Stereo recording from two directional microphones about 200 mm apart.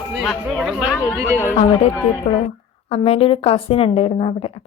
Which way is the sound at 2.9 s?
30° left (ahead or behind).